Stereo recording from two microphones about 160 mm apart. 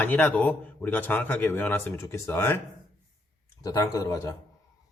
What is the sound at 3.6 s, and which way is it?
Speech, 20° left (ahead or behind).